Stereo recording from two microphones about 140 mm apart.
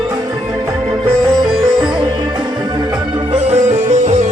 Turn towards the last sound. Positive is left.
turn(degrees=-55)  # may be behind; listen again after turning